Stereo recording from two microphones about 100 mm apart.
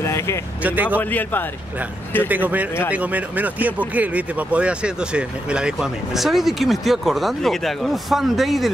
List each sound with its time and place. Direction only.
0.0 s vehicle: 30° left (ahead or behind)
0.6 s speech: 15° right (ahead or behind)
0.9 s a man's voice: 20° left (ahead or behind)
2.2 s speech: 15° right (ahead or behind)